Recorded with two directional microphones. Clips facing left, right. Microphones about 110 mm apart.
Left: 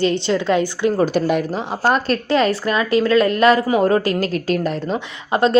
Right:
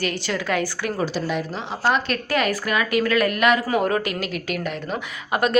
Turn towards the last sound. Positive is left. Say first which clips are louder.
# left 5 dB
turn(degrees=30)  # may be behind; listen again after turning